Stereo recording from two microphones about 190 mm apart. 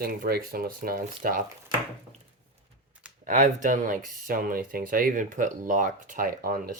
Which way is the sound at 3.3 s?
40° right (ahead or behind).